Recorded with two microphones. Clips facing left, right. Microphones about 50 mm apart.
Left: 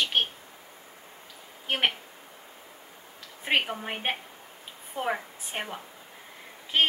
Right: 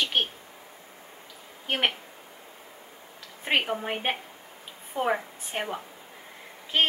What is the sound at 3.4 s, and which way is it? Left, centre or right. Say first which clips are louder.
A woman's voice: right 1 dB; centre.